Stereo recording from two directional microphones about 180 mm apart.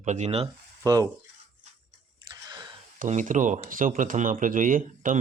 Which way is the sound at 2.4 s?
25° right (ahead or behind).